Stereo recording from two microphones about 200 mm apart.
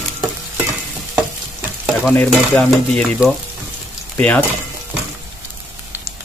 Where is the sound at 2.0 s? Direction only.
Centre (ahead or behind).